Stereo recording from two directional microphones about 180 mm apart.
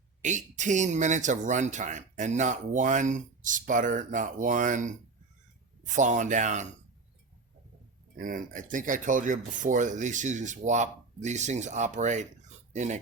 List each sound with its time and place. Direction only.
0.2 s speech: 45° right (ahead or behind)
8.1 s speech: 50° right (ahead or behind)